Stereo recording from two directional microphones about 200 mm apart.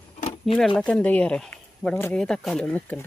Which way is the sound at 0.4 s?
Centre (ahead or behind).